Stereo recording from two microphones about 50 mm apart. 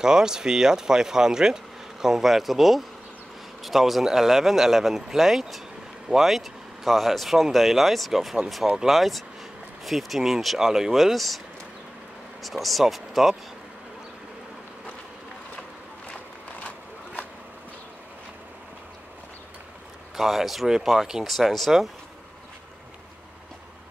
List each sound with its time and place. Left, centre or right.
0.0 s speech: centre
12.4 s speech: centre
16.6 s a sound: left
20.2 s speech: centre